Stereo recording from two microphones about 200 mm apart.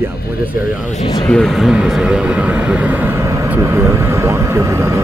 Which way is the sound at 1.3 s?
Centre (ahead or behind).